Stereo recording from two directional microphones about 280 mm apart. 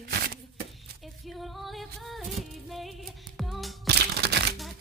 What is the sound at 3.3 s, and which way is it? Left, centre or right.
Music, centre.